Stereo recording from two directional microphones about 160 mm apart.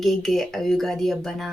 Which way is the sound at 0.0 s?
Centre (ahead or behind).